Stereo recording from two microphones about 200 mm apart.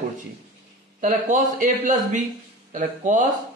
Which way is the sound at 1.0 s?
40° right (ahead or behind).